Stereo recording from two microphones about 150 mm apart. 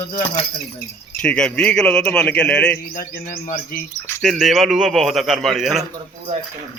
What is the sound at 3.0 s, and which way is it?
Bird, 70° left (ahead or behind).